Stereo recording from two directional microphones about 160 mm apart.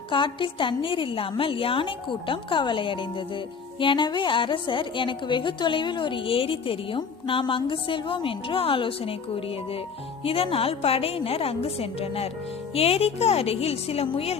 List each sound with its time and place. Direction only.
0.1 s a woman's voice: 30° left (ahead or behind)
10.2 s a woman's voice: 35° left (ahead or behind)